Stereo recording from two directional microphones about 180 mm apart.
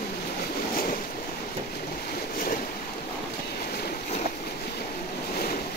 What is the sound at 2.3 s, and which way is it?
Boat, 50° left (ahead or behind).